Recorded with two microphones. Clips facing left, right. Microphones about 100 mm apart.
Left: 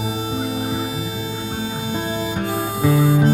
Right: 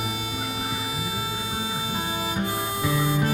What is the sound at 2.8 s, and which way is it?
Harmonica, 45° left (ahead or behind).